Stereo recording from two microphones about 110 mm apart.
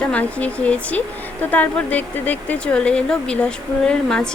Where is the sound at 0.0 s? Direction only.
10° left (ahead or behind).